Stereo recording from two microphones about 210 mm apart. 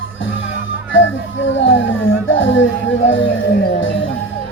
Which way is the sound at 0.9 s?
60° left (ahead or behind).